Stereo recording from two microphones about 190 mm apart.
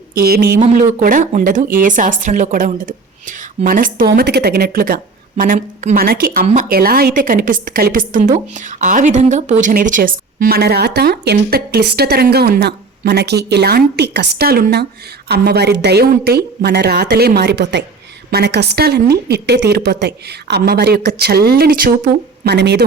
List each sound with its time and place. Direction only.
0.1 s a woman's voice: 50° right (ahead or behind)
6.4 s speech: 40° right (ahead or behind)
6.7 s a woman's voice: 50° right (ahead or behind)